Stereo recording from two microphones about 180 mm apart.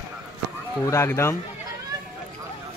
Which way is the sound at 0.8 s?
15° left (ahead or behind).